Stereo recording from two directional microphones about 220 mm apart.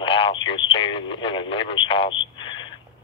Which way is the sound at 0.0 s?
25° left (ahead or behind).